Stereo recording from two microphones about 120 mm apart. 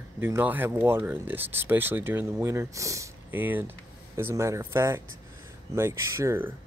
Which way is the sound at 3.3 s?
15° right (ahead or behind).